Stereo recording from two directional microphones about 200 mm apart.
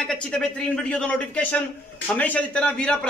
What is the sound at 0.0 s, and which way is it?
A man's voice, 5° left (ahead or behind).